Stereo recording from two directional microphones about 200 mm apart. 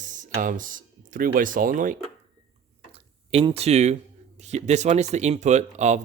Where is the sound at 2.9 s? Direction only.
30° right (ahead or behind).